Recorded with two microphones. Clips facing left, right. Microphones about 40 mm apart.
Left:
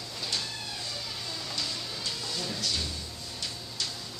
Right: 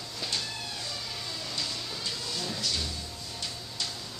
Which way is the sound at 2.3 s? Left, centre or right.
Centre.